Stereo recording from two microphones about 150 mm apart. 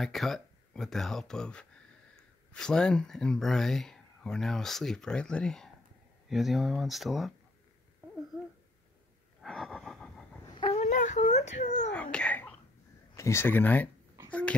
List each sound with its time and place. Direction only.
0.0 s speech: centre (ahead or behind)
9.4 s a sound: centre (ahead or behind)
10.6 s whimper: 45° left (ahead or behind)
11.9 s babbling: 5° left (ahead or behind)
13.1 s speech: 20° left (ahead or behind)
14.3 s dog: 10° left (ahead or behind)